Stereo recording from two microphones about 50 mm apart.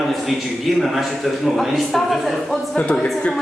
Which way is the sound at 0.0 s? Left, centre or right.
Centre.